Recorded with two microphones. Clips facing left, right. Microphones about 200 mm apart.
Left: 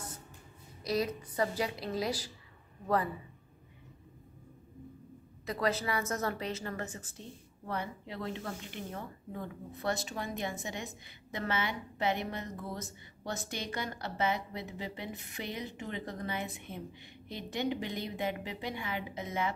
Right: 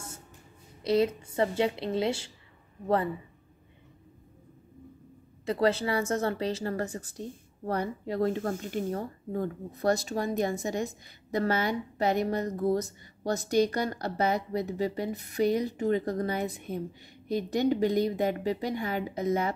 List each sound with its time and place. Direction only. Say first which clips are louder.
0.8 s a woman's voice: right 7 dB; 25° right (ahead or behind)
5.4 s a woman's voice: right 7 dB; 30° right (ahead or behind)